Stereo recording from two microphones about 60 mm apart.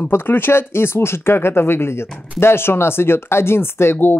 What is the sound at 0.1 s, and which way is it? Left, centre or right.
Speech, left.